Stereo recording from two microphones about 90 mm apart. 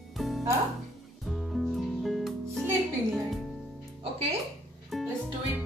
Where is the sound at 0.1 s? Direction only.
Centre (ahead or behind).